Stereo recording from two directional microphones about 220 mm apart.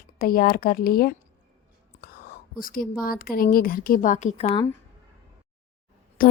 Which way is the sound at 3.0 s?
40° left (ahead or behind).